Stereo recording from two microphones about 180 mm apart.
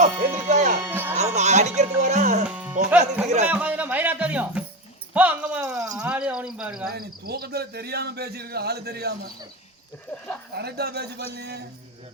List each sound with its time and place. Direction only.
0.0 s music: 40° right (ahead or behind)
0.8 s music: 10° right (ahead or behind)
1.1 s music: 40° right (ahead or behind)
2.0 s speech: 40° right (ahead or behind)
2.5 s music: 10° right (ahead or behind)
3.2 s a man's voice: 40° right (ahead or behind)
3.5 s speech: 10° right (ahead or behind)
5.7 s speech: 20° right (ahead or behind)
6.0 s speech: 5° right (ahead or behind)
6.9 s speech: 60° right (ahead or behind)
10.1 s a sound: 10° left (ahead or behind)
10.5 s speech: 65° right (ahead or behind)